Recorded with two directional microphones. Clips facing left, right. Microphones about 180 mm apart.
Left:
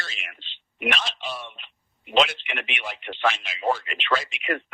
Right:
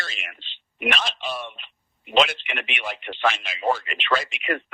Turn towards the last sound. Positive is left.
turn(degrees=-60)  # may be behind; listen again after turning